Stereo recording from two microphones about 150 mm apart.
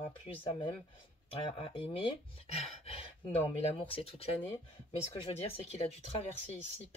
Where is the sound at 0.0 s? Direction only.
35° left (ahead or behind).